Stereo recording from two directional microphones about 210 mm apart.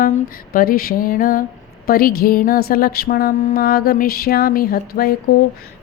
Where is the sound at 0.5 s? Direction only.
45° left (ahead or behind).